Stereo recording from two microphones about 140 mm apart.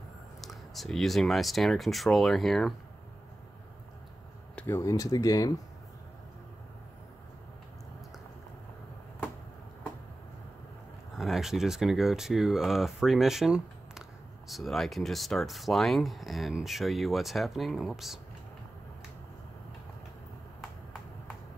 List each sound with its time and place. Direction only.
0.4 s speech: centre (ahead or behind)
4.6 s speech: 20° left (ahead or behind)
11.1 s speech: centre (ahead or behind)